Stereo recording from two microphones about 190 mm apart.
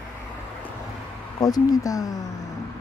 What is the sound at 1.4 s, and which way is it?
Speech, 20° left (ahead or behind).